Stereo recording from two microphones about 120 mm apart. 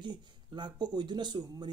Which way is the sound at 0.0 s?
40° right (ahead or behind).